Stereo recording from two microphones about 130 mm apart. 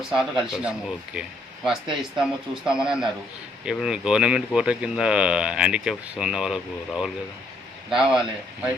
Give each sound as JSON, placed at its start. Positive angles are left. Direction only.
{"t": 0.1, "sound": "speech", "side_deg": -5}